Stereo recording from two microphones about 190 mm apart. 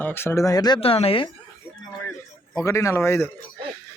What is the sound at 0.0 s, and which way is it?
Speech, 10° left (ahead or behind).